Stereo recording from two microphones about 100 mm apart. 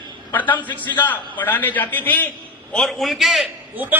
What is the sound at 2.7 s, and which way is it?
Speech, centre (ahead or behind).